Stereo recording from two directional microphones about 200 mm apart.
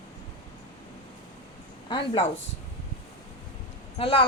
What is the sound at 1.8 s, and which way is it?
Speech, 25° left (ahead or behind).